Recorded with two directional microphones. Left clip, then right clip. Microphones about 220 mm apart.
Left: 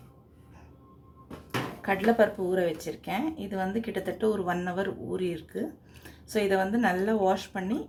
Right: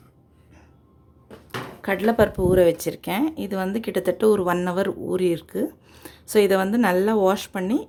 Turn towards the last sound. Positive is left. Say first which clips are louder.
# right 7 dB
turn(degrees=-50)  # may be behind; listen again after turning